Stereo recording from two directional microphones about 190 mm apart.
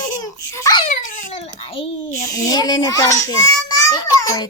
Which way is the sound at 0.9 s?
40° left (ahead or behind).